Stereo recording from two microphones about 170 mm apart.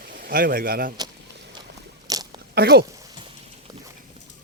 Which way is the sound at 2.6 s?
65° right (ahead or behind).